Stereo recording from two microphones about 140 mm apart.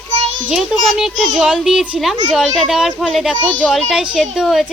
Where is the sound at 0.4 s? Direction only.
5° right (ahead or behind).